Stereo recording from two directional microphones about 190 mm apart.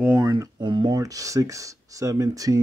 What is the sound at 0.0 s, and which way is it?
Speech, 20° right (ahead or behind).